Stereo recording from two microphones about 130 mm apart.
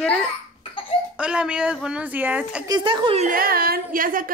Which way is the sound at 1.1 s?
5° right (ahead or behind).